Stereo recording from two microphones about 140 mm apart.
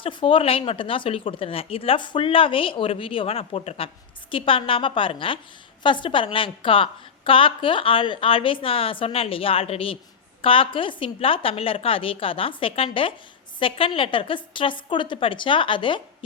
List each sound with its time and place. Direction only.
0.0 s a woman's voice: 35° left (ahead or behind)